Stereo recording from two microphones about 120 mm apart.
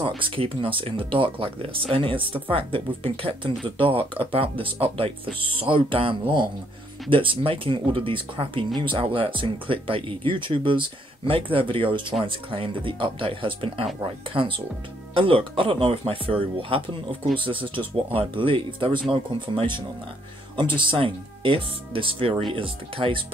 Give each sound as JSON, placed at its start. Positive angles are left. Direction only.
{"t": 0.2, "sound": "speech", "side_deg": -45}